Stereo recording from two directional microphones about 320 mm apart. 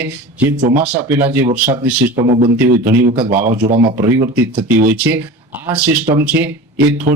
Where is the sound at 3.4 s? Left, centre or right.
Right.